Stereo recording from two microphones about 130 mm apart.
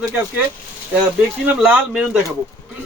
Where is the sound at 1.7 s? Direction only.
5° right (ahead or behind).